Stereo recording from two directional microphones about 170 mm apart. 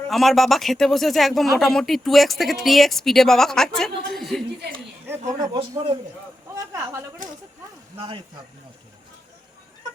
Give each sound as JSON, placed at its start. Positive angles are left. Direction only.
{"t": 0.1, "sound": "speech", "side_deg": 0}
{"t": 5.4, "sound": "speech", "side_deg": -20}
{"t": 7.9, "sound": "speech", "side_deg": -30}